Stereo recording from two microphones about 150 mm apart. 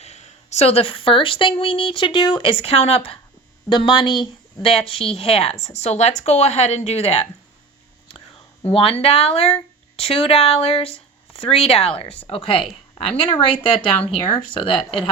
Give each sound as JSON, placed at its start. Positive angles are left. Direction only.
{"t": 0.0, "sound": "speech", "side_deg": 50}
{"t": 3.7, "sound": "a woman's voice", "side_deg": 30}
{"t": 8.6, "sound": "speech", "side_deg": 40}